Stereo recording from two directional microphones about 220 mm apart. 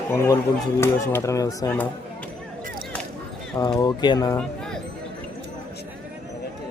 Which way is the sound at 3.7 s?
20° left (ahead or behind).